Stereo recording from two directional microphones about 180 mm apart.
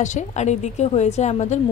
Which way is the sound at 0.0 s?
40° left (ahead or behind).